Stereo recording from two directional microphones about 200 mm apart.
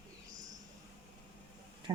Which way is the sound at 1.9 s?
20° right (ahead or behind).